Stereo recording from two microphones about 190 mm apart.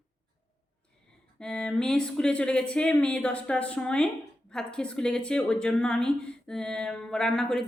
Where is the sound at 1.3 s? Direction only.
5° left (ahead or behind).